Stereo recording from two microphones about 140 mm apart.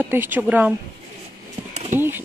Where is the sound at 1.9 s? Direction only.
15° right (ahead or behind).